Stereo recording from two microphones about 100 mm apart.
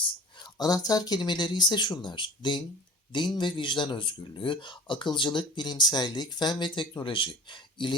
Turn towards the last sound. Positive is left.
turn(degrees=55)  # may be behind; listen again after turning